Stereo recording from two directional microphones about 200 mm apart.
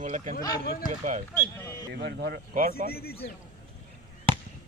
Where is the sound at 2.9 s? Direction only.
50° left (ahead or behind).